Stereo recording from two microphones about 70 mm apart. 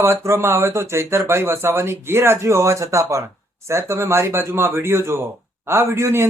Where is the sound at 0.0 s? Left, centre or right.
Right.